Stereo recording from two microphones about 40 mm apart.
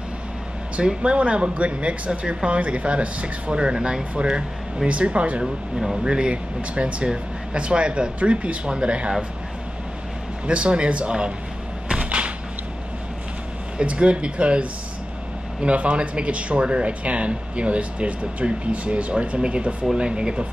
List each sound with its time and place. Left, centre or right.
0.8 s speech: right
5.4 s speech: centre
6.0 s speech: right
10.4 s speech: right
11.9 s a sound: right
13.7 s speech: right